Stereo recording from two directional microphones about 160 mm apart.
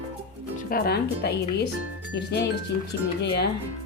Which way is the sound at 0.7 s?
80° left.